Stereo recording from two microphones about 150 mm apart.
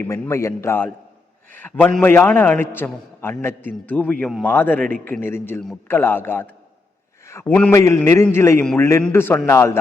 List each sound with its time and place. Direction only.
0.1 s a man's voice: 20° left (ahead or behind)